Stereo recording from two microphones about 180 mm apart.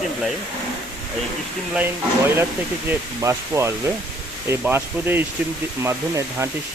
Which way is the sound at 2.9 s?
15° right (ahead or behind).